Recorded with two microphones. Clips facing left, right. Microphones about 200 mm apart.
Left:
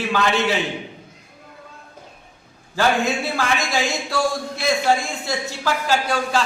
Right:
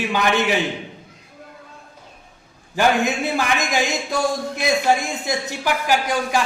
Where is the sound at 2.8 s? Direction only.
20° right (ahead or behind).